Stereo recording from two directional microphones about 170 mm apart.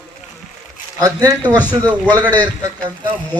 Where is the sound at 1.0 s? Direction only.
20° right (ahead or behind).